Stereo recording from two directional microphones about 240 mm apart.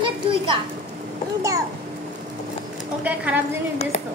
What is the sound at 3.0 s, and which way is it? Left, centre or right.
Speech, centre.